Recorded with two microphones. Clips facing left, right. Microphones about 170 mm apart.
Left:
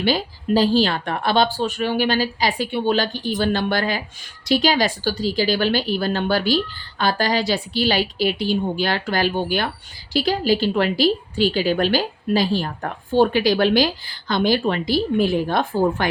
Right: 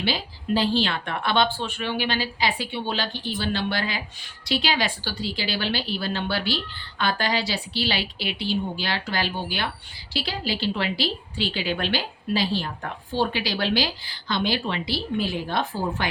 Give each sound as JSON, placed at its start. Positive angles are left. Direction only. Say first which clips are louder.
{"t": 0.0, "sound": "a woman's voice", "louder": "left 7 dB", "side_deg": 45}